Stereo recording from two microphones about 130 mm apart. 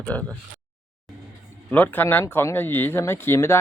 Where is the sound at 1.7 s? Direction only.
15° left (ahead or behind).